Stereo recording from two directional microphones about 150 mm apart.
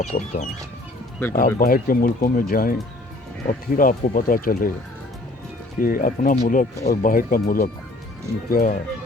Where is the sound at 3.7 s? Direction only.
65° left (ahead or behind).